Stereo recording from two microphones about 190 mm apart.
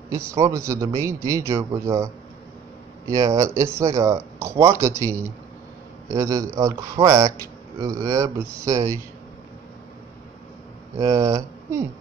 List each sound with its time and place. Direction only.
0.1 s speech: 15° right (ahead or behind)
3.1 s speech: 15° right (ahead or behind)
11.0 s speech: 15° right (ahead or behind)